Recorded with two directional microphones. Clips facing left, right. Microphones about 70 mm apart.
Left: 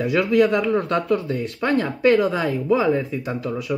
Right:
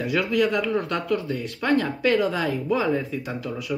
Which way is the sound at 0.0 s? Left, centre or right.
Left.